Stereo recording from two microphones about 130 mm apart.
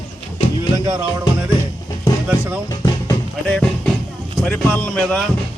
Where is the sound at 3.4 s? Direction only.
5° left (ahead or behind).